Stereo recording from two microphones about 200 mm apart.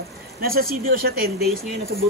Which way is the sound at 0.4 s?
50° right (ahead or behind).